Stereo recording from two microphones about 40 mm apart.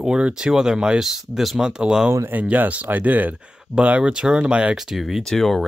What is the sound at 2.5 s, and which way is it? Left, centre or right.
Speech, right.